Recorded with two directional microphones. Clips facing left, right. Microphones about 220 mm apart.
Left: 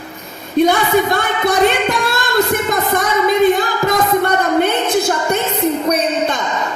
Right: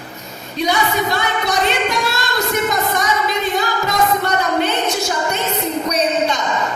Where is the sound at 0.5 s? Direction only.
55° left (ahead or behind).